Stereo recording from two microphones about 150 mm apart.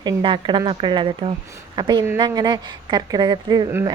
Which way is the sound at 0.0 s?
30° right (ahead or behind).